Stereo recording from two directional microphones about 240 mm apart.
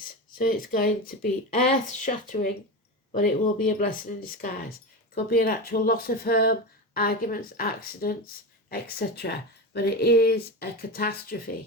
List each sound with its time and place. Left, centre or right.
0.0 s speech: left